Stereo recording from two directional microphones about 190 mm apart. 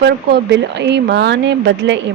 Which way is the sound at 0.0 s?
65° right (ahead or behind).